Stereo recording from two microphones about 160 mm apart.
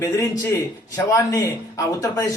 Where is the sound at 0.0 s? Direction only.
20° left (ahead or behind).